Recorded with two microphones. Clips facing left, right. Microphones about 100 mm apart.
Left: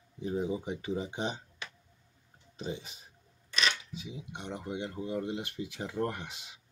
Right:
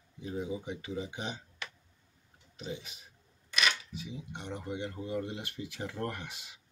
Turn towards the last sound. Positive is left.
turn(degrees=20)  # may be behind; listen again after turning